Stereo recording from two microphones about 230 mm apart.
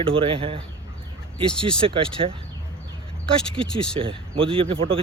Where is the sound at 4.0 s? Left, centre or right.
Right.